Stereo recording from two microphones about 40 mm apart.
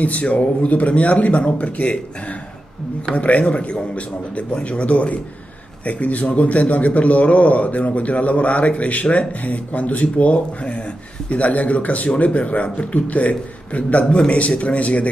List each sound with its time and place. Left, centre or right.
0.0 s a man's voice: left
3.2 s a man's voice: left